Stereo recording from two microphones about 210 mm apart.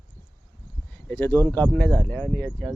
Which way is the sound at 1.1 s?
10° left (ahead or behind).